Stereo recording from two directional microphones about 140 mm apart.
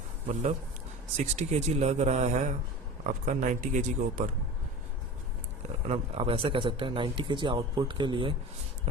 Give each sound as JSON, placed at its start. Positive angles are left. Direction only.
{"t": 1.1, "sound": "speech", "side_deg": -55}
{"t": 3.0, "sound": "speech", "side_deg": -65}
{"t": 5.9, "sound": "speech", "side_deg": -45}